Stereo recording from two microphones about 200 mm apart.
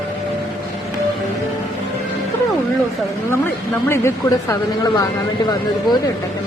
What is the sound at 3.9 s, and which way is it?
Speech, 15° left (ahead or behind).